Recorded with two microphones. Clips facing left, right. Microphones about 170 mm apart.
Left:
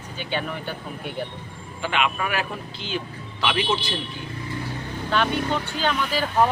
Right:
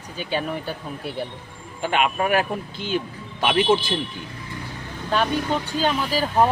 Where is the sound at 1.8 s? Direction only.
45° right (ahead or behind).